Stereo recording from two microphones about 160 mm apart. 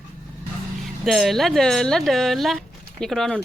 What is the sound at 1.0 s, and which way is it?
Speech, centre (ahead or behind).